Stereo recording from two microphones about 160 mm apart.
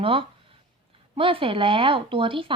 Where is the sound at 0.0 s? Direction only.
35° right (ahead or behind).